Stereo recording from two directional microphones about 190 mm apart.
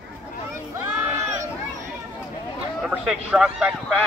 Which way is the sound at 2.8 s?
Centre (ahead or behind).